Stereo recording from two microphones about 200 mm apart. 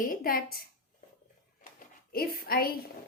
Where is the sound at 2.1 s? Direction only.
50° left (ahead or behind).